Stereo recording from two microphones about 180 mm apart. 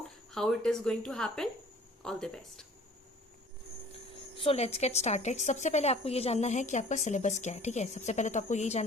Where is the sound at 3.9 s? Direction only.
30° left (ahead or behind).